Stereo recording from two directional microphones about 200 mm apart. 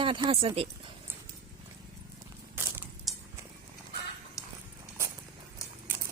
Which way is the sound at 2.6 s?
10° right (ahead or behind).